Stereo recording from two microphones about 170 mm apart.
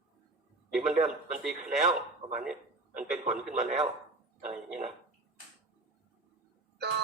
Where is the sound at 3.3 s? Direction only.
Centre (ahead or behind).